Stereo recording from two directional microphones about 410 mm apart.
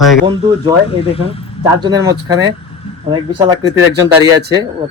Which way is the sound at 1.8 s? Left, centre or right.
Centre.